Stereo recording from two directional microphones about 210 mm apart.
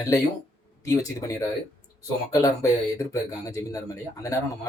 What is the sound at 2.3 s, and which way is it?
Speech, 15° left (ahead or behind).